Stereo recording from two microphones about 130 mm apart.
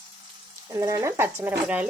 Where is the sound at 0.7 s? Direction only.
25° right (ahead or behind).